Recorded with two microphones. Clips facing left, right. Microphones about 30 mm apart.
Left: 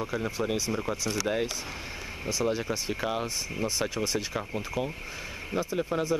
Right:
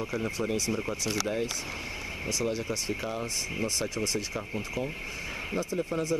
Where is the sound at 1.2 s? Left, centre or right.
Left.